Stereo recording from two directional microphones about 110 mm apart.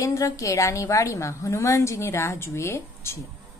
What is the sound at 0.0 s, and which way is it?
A woman's voice, 30° left (ahead or behind).